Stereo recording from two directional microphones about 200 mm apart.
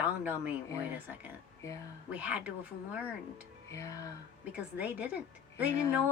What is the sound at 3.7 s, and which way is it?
Music, 15° left (ahead or behind).